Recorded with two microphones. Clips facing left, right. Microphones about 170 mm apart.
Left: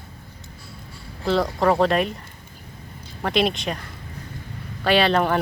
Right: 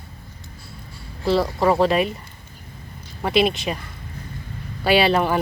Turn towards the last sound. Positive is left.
turn(degrees=-5)  # may be behind; listen again after turning